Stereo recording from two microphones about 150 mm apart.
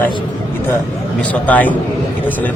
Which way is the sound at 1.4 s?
10° left (ahead or behind).